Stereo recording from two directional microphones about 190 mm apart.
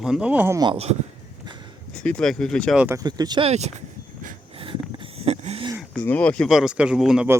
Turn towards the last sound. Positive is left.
turn(degrees=-5)  # may be behind; listen again after turning